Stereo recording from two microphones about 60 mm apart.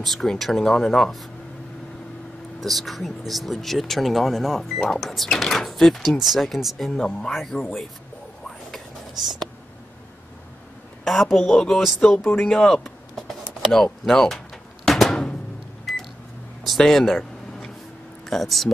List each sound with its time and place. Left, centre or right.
0.0 s speech: centre
2.6 s speech: centre
7.0 s speech: centre
8.7 s whispering: centre
11.1 s speech: centre
14.9 s drum: centre
15.8 s microwave oven: centre
16.6 s a sound: centre
18.2 s speech: centre